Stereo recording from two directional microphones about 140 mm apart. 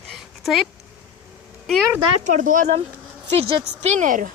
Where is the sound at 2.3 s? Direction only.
65° right (ahead or behind).